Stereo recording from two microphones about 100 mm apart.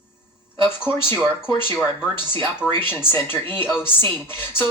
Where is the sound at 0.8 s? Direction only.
20° left (ahead or behind).